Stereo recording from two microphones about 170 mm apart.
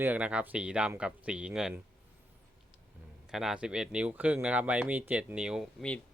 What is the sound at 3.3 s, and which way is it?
Speech, 5° right (ahead or behind).